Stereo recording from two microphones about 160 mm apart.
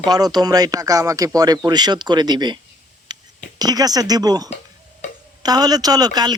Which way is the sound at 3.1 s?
25° right (ahead or behind).